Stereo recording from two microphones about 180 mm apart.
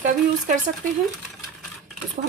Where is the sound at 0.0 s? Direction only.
45° right (ahead or behind).